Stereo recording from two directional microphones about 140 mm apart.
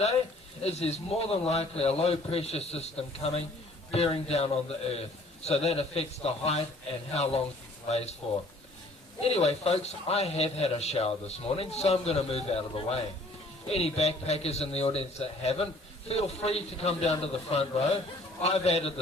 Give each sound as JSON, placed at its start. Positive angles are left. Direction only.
{"t": 0.6, "sound": "a man's voice", "side_deg": 50}
{"t": 9.2, "sound": "a man's voice", "side_deg": 45}